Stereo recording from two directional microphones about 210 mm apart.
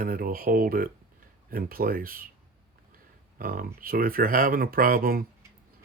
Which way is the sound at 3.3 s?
45° right (ahead or behind).